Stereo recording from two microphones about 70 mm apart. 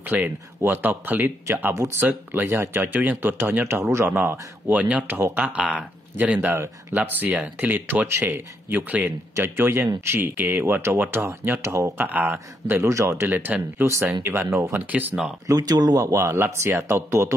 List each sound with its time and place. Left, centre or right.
0.0 s speech: right
4.1 s speech: right
9.3 s speech: right
12.9 s speech: right
13.3 s speech: right
14.9 s speech: right
15.4 s speech: right
16.0 s speech: right